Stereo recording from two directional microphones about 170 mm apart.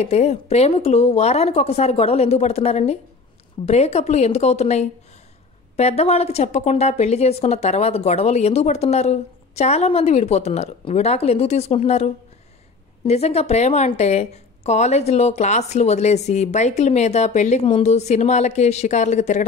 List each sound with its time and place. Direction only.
0.0 s a woman's voice: 40° left (ahead or behind)